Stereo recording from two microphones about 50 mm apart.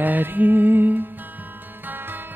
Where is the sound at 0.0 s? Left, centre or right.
Right.